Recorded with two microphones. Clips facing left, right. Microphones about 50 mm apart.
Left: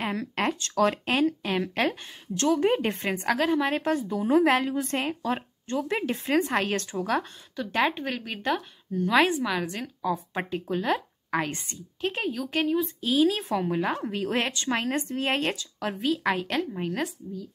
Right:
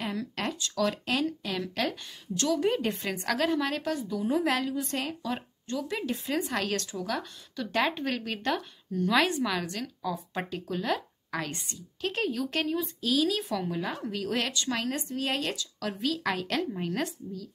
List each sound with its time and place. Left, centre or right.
0.0 s a woman's voice: left
7.5 s a woman's voice: centre
9.8 s a woman's voice: left; by 17.1 s centre